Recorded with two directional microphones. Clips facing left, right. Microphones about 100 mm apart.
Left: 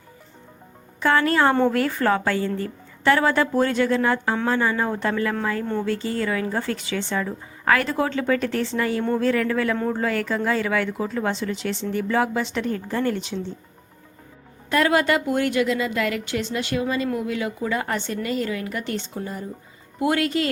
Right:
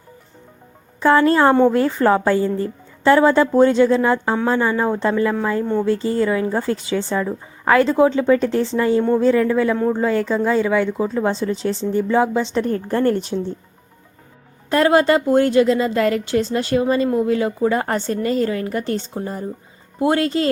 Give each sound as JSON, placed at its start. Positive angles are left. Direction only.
{"t": 1.0, "sound": "speech", "side_deg": -30}
{"t": 5.8, "sound": "speech", "side_deg": -30}
{"t": 7.3, "sound": "speech", "side_deg": -20}
{"t": 9.7, "sound": "speech", "side_deg": -10}
{"t": 10.0, "sound": "a woman's voice", "side_deg": -25}
{"t": 11.9, "sound": "speech", "side_deg": -25}
{"t": 12.9, "sound": "speech", "side_deg": -45}
{"t": 14.7, "sound": "a woman's voice", "side_deg": -30}